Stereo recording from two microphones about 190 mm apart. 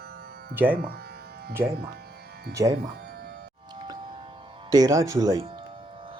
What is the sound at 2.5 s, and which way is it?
Speech, 15° right (ahead or behind).